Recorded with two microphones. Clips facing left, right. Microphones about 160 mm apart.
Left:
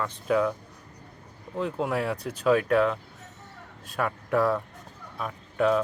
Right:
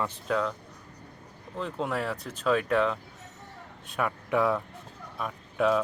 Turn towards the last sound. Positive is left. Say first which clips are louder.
# left 2 dB
turn(degrees=0)  # may be behind; listen again after turning